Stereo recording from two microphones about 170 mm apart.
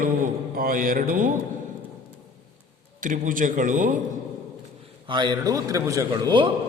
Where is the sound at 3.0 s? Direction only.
55° right (ahead or behind).